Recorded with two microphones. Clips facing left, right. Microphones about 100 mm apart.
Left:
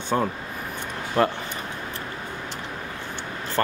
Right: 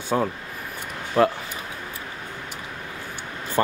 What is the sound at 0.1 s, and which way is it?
Speech, centre (ahead or behind).